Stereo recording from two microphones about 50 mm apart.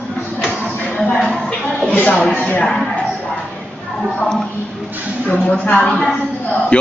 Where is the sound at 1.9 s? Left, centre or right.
Left.